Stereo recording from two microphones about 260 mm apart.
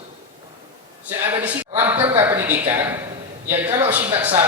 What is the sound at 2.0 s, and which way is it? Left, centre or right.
Speech, right.